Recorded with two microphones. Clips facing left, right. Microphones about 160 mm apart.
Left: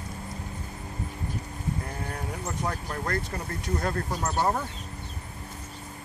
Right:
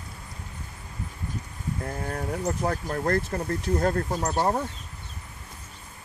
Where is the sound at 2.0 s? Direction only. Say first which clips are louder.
Right 6 dB; 45° right (ahead or behind).